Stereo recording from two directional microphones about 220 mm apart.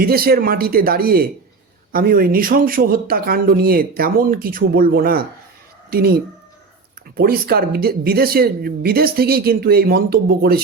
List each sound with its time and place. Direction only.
0.0 s speech: 45° right (ahead or behind)